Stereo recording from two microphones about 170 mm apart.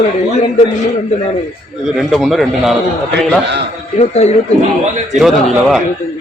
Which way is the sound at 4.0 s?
40° left (ahead or behind).